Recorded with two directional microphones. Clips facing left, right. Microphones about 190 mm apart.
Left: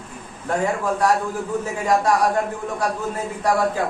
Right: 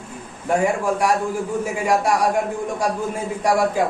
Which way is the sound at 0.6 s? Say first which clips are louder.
Left 1 dB; 10° right (ahead or behind).